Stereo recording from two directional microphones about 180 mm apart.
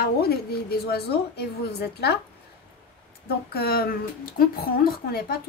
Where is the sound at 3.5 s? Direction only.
60° left (ahead or behind).